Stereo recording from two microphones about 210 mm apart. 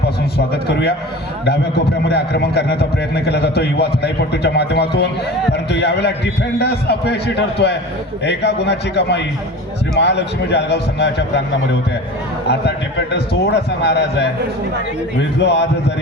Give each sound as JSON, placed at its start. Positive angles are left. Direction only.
{"t": 0.3, "sound": "a man's voice", "side_deg": 50}
{"t": 2.0, "sound": "a man's voice", "side_deg": 50}